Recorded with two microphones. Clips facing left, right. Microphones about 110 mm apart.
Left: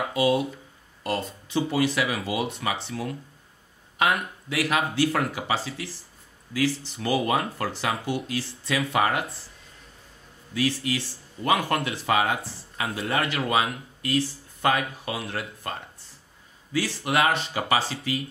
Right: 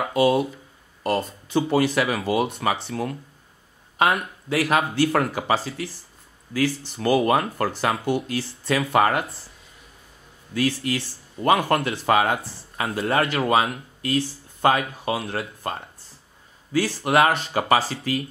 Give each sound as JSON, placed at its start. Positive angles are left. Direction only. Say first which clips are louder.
{"t": 0.1, "sound": "speech", "louder": "right 4 dB", "side_deg": -50}
{"t": 10.5, "sound": "speech", "louder": "right 2 dB", "side_deg": -50}
{"t": 16.7, "sound": "speech", "louder": "right 5 dB", "side_deg": -45}